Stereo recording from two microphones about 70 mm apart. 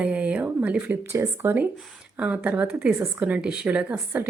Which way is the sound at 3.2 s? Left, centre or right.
Centre.